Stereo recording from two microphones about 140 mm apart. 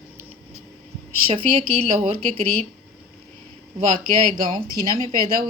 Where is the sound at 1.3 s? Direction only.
40° right (ahead or behind).